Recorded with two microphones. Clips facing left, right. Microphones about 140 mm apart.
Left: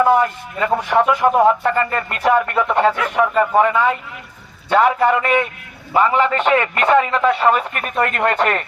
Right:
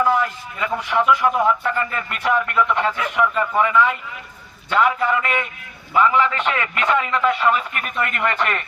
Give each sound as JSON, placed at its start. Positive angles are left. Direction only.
{"t": 0.0, "sound": "a man's voice", "side_deg": 50}